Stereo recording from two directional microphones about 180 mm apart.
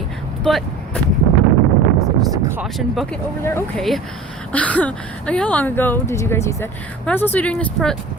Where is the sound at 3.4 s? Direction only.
15° left (ahead or behind).